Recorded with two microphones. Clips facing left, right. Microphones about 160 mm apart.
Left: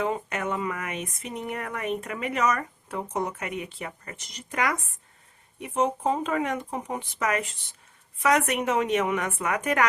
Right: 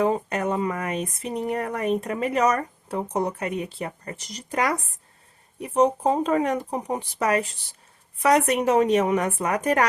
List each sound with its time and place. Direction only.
0.0 s speech: 35° right (ahead or behind)